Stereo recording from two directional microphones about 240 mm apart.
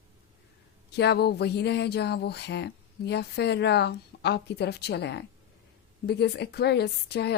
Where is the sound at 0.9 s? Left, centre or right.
Left.